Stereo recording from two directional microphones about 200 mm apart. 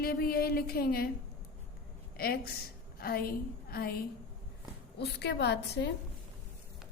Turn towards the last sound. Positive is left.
turn(degrees=55)  # may be behind; listen again after turning